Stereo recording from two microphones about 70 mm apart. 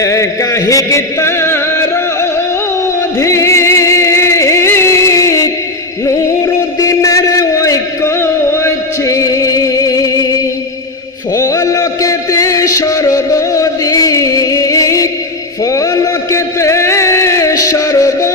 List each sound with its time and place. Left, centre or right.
0.0 s music: left
3.2 s music: left
6.7 s a sound: left
8.2 s music: left
11.3 s music: left
15.6 s a sound: left